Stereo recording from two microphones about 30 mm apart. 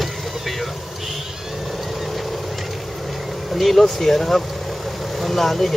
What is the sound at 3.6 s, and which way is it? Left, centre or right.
Speech, centre.